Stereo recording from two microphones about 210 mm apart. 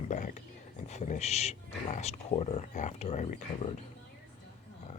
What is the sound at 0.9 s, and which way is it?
Speech, 35° left (ahead or behind).